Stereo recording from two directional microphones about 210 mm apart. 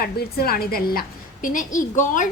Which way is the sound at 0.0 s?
45° left (ahead or behind).